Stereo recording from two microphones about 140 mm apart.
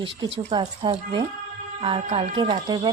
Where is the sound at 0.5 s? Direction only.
35° right (ahead or behind).